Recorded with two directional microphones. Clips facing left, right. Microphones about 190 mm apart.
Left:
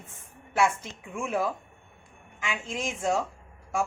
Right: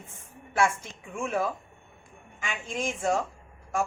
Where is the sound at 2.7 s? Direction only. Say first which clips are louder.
Right 1 dB; centre (ahead or behind).